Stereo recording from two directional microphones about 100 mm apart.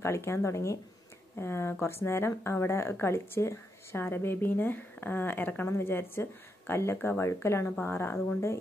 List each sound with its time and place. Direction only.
0.0 s a woman's voice: 30° left (ahead or behind)